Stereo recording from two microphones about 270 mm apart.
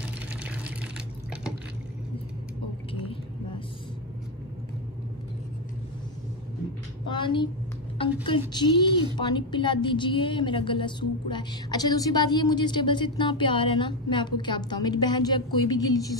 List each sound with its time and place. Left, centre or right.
0.3 s water: centre
2.9 s vehicle: centre
7.1 s a sound: centre
8.0 s a woman's voice: centre